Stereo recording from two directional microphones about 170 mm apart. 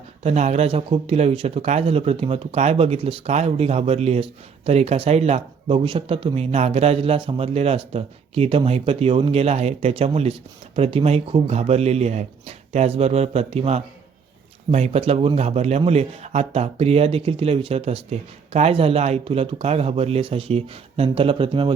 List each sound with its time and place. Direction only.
0.2 s speech: 40° right (ahead or behind)